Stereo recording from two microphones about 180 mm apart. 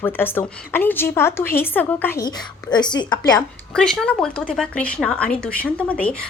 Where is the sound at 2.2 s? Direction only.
25° left (ahead or behind).